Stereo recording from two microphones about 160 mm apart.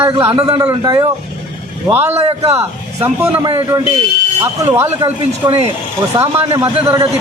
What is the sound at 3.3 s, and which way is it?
Speech, 35° right (ahead or behind).